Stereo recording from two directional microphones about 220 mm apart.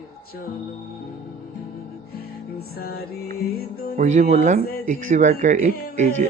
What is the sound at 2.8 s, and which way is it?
Music, 45° left (ahead or behind).